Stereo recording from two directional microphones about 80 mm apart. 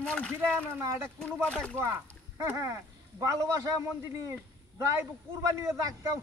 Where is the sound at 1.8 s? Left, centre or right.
Right.